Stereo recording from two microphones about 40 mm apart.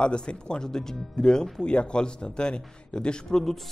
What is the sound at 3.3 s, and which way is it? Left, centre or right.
Speech, centre.